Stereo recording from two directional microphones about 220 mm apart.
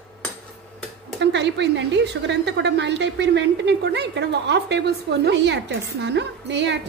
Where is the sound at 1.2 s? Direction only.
55° right (ahead or behind).